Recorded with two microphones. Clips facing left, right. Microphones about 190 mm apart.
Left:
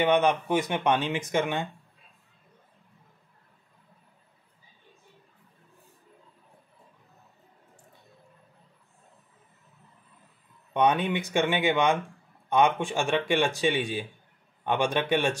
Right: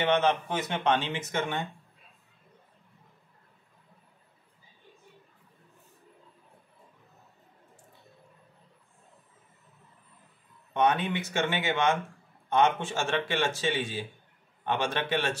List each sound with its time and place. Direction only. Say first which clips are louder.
0.0 s speech: left 3 dB; 15° left (ahead or behind)
10.7 s speech: left 2 dB; 15° left (ahead or behind)